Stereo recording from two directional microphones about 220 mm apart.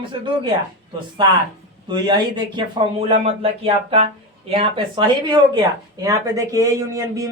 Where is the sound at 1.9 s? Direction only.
20° right (ahead or behind).